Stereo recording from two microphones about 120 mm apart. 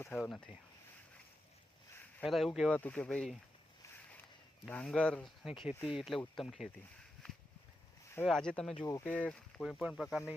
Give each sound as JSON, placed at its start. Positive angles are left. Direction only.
{"t": 0.2, "sound": "speech", "side_deg": 5}
{"t": 2.2, "sound": "speech", "side_deg": 0}
{"t": 2.7, "sound": "speech", "side_deg": 10}
{"t": 4.6, "sound": "speech", "side_deg": 10}
{"t": 8.2, "sound": "speech", "side_deg": 5}
{"t": 8.9, "sound": "speech", "side_deg": 20}
{"t": 9.1, "sound": "speech", "side_deg": 10}